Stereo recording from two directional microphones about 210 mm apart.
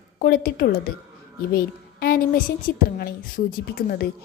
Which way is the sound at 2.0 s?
45° left (ahead or behind).